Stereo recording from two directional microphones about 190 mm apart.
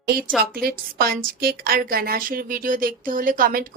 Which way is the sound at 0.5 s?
55° right (ahead or behind).